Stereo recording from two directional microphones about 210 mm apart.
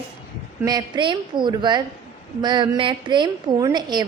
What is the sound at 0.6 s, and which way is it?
A woman's voice, 20° right (ahead or behind).